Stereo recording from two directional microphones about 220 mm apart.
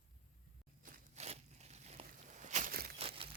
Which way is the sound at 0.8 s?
30° right (ahead or behind).